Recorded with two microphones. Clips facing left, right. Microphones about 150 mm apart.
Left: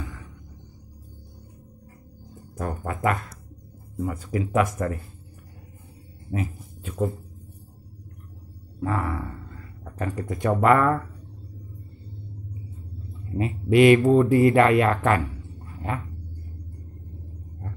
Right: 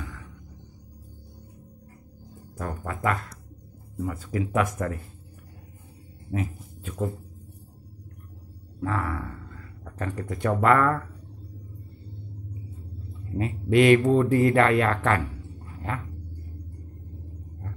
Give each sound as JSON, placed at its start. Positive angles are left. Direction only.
{"t": 2.5, "sound": "speech", "side_deg": 20}
{"t": 6.3, "sound": "dog", "side_deg": 5}
{"t": 8.7, "sound": "speech", "side_deg": 15}
{"t": 13.4, "sound": "speech", "side_deg": 10}